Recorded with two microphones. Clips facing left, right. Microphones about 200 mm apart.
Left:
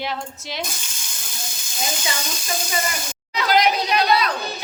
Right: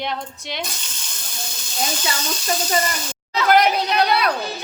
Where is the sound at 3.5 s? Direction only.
60° right (ahead or behind).